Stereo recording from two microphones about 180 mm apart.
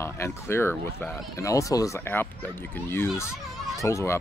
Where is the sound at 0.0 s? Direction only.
15° left (ahead or behind).